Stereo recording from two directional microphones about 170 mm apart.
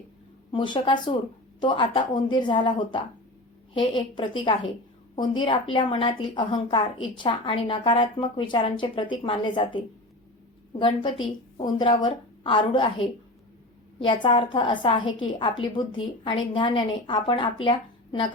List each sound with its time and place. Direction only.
0.5 s a woman's voice: 25° left (ahead or behind)
14.0 s a woman's voice: 30° left (ahead or behind)